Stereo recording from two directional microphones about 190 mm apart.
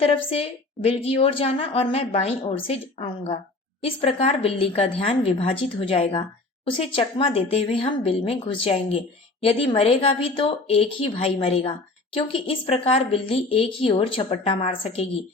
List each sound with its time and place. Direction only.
0.0 s a woman's voice: 30° left (ahead or behind)